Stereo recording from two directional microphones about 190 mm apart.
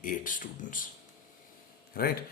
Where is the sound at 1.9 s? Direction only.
50° left (ahead or behind).